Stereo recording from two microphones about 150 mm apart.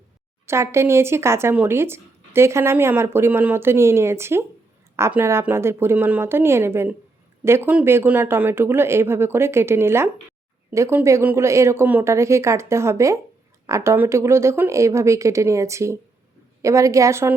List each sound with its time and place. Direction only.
0.4 s a woman's voice: 20° right (ahead or behind)